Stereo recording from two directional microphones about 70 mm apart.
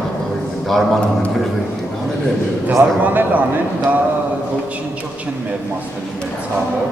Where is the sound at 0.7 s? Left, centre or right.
Centre.